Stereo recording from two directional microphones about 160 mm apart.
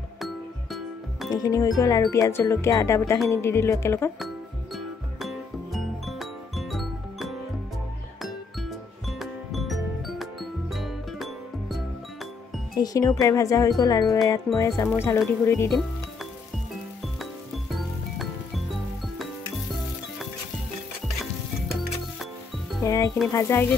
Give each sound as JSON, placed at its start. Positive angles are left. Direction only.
{"t": 0.2, "sound": "music", "side_deg": 0}
{"t": 1.3, "sound": "speech", "side_deg": 25}
{"t": 4.7, "sound": "music", "side_deg": 0}
{"t": 12.7, "sound": "speech", "side_deg": 25}
{"t": 17.0, "sound": "music", "side_deg": 0}
{"t": 21.7, "sound": "music", "side_deg": 0}
{"t": 22.8, "sound": "speech", "side_deg": 20}